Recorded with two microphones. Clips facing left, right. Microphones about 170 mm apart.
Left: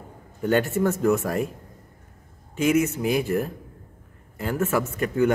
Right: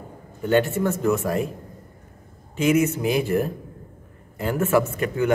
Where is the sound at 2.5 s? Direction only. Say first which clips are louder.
Right 1 dB; 45° left (ahead or behind).